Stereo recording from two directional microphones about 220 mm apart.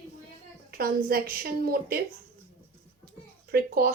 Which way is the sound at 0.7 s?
40° right (ahead or behind).